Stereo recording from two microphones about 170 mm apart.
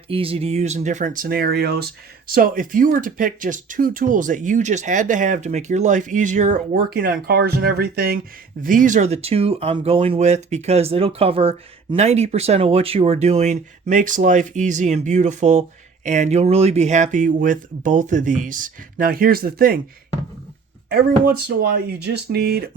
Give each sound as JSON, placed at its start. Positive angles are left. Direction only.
{"t": 0.1, "sound": "speech", "side_deg": -35}
{"t": 6.9, "sound": "speech", "side_deg": -60}
{"t": 8.6, "sound": "speech", "side_deg": -50}
{"t": 20.9, "sound": "speech", "side_deg": -65}